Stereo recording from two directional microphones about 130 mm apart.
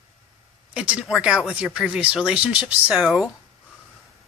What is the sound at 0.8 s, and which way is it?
Speech, 10° right (ahead or behind).